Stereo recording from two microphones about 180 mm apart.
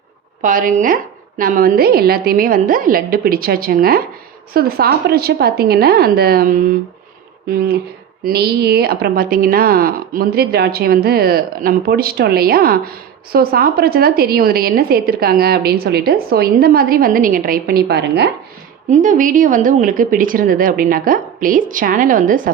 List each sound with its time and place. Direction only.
0.4 s a woman's voice: 50° right (ahead or behind); by 18.3 s 65° right (ahead or behind)
18.9 s a woman's voice: 45° right (ahead or behind)